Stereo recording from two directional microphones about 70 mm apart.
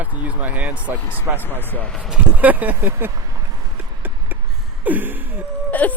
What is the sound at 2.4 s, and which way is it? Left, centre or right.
Speech, right.